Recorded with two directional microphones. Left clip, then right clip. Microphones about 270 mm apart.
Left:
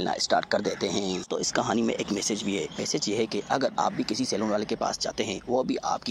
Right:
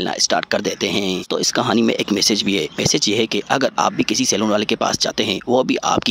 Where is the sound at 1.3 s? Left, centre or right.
Right.